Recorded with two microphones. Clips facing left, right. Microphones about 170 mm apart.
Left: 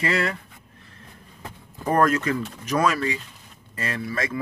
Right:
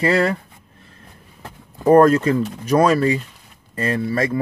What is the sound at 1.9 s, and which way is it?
Speech, 30° right (ahead or behind).